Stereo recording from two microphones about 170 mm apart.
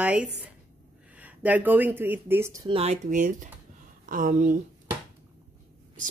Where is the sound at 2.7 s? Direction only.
40° right (ahead or behind).